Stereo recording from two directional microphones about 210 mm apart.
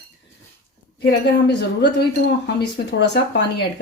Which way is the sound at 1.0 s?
50° left (ahead or behind).